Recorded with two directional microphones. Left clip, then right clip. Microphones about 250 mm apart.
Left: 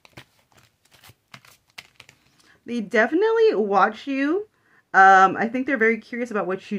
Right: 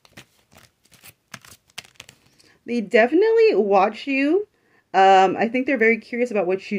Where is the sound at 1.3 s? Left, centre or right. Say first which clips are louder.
Right 5 dB; right.